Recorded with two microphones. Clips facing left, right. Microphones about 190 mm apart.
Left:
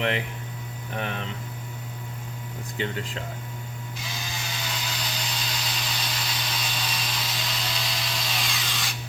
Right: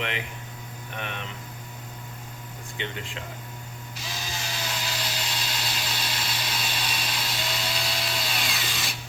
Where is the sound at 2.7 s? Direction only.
40° left (ahead or behind).